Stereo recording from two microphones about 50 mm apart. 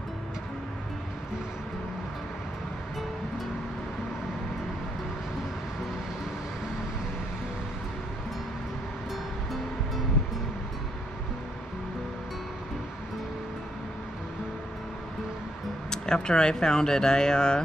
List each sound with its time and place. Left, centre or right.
15.9 s speech: centre